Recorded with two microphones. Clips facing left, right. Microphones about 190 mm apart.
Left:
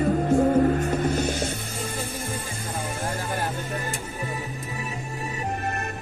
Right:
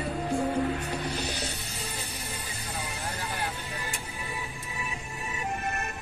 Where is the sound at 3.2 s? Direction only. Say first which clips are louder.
Left 6 dB; 45° left (ahead or behind).